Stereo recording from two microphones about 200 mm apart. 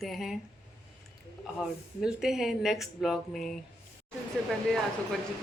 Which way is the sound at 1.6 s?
Centre (ahead or behind).